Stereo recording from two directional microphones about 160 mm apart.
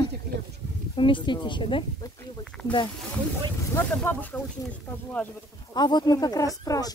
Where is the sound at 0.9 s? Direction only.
30° left (ahead or behind).